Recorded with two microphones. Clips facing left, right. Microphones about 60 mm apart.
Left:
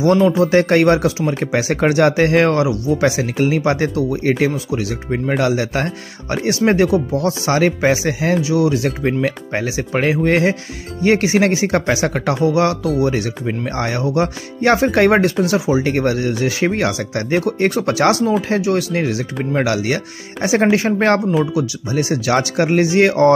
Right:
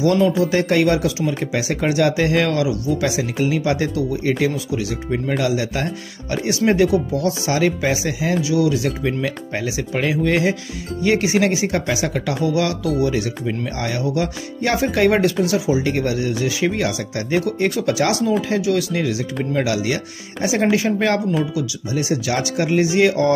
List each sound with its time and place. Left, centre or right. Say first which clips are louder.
0.4 s speech: left 4 dB; left
5.4 s speech: left 3 dB; left